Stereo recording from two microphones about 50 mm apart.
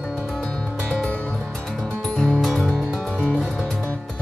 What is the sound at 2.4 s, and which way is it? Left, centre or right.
Music, centre.